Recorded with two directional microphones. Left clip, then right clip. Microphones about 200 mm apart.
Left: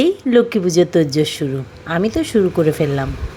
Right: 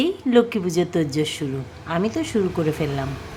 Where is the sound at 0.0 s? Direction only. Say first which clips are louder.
Left 5 dB; 20° left (ahead or behind).